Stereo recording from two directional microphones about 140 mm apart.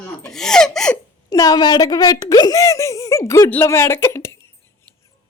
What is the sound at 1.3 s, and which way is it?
Speech, 25° left (ahead or behind).